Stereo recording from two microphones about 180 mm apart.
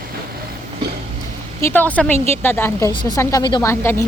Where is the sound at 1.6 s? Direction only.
10° left (ahead or behind).